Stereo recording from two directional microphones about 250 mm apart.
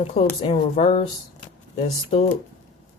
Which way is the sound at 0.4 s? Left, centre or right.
Left.